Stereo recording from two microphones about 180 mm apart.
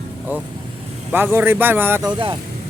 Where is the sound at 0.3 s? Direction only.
10° right (ahead or behind).